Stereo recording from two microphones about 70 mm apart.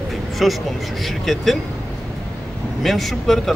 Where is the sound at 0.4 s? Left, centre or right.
Centre.